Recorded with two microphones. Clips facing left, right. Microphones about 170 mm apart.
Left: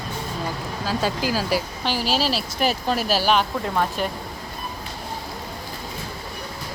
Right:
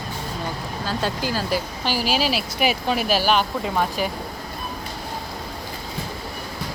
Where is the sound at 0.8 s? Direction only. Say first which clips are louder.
Left 2 dB; 5° left (ahead or behind).